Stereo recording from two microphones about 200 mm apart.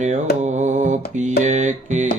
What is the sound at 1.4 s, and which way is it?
Music, 35° right (ahead or behind).